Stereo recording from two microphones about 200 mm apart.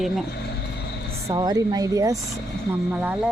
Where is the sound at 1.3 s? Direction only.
20° right (ahead or behind).